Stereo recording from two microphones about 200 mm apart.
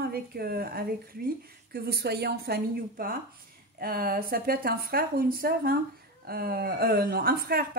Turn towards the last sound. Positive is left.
turn(degrees=-50)  # may be behind; listen again after turning